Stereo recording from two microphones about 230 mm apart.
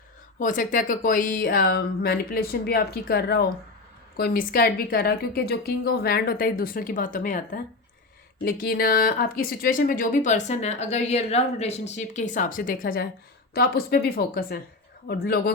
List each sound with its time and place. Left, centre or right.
0.3 s speech: left